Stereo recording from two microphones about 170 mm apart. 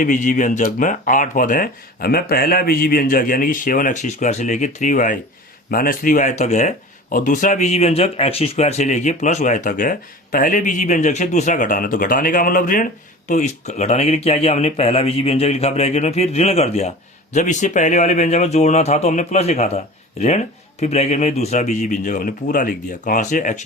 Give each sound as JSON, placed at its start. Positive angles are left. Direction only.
{"t": 0.0, "sound": "speech", "side_deg": 50}